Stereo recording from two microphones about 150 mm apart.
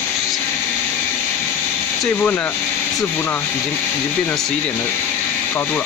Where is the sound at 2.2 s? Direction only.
15° left (ahead or behind).